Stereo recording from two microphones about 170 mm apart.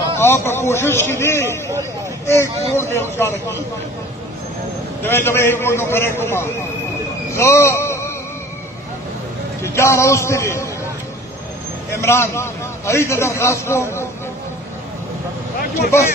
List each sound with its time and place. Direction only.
0.2 s a man's voice: 15° left (ahead or behind)
2.7 s a man's voice: 15° left (ahead or behind)
5.0 s a man's voice: 15° left (ahead or behind)
7.3 s a sound: 15° left (ahead or behind)
9.6 s a man's voice: 15° left (ahead or behind)
11.9 s a man's voice: 15° left (ahead or behind)
15.9 s a man's voice: 15° left (ahead or behind)